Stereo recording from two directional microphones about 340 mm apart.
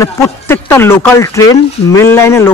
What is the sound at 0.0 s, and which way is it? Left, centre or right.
Speech, centre.